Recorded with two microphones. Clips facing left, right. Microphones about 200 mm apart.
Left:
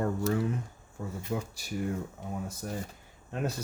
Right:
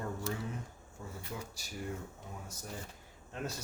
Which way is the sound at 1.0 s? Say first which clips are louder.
Left 9 dB; 65° left (ahead or behind).